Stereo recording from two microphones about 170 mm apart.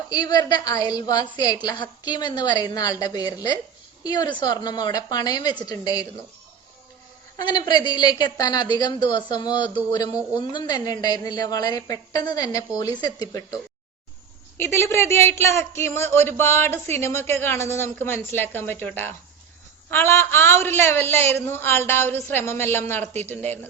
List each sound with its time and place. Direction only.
0.1 s a woman's voice: 25° left (ahead or behind)
7.4 s a woman's voice: 25° left (ahead or behind)
14.6 s speech: 15° left (ahead or behind)